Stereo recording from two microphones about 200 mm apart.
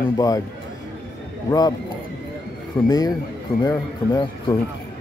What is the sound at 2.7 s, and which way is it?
Speech, 10° left (ahead or behind).